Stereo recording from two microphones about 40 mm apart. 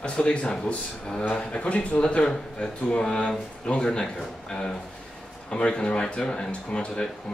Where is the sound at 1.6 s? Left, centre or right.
Left.